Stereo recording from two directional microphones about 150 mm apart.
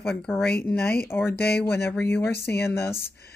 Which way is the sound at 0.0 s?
Centre (ahead or behind).